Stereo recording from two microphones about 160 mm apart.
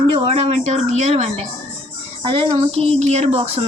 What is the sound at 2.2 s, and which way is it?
Speech, 30° right (ahead or behind).